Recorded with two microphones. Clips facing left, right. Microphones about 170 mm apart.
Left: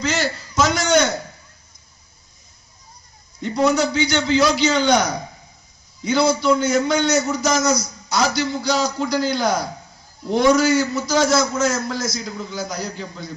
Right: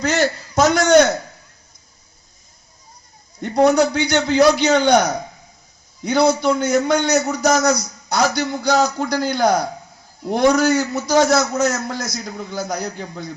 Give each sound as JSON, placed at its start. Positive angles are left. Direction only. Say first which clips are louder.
{"t": 0.0, "sound": "a sound", "louder": "right 4 dB", "side_deg": -55}
{"t": 3.4, "sound": "a man's voice", "louder": "right 4 dB", "side_deg": -55}
{"t": 6.1, "sound": "a man's voice", "louder": "right 1 dB", "side_deg": -50}